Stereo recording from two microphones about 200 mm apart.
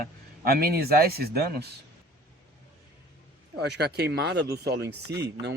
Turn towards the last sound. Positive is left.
turn(degrees=-55)  # may be behind; listen again after turning